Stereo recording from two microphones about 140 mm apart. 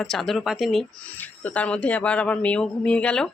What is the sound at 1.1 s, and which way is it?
Speech, 10° left (ahead or behind).